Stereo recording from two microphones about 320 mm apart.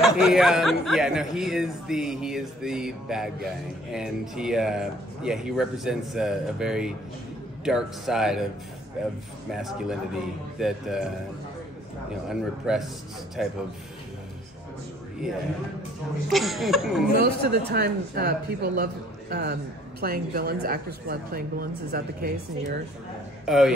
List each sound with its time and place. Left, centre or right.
0.0 s speech: centre
12.3 s speech: centre
16.3 s speech: centre
17.1 s speech: right
23.4 s a man's voice: centre